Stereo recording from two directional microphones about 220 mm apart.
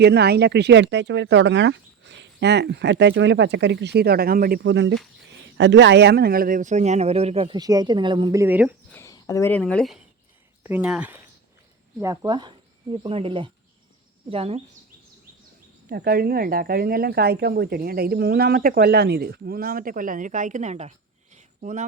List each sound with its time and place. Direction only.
0.0 s speech: 50° right (ahead or behind); by 8.7 s 10° right (ahead or behind)
8.9 s speech: 15° left (ahead or behind); by 14.6 s 25° right (ahead or behind)
15.9 s speech: 45° right (ahead or behind)
21.3 s a sound: 35° right (ahead or behind)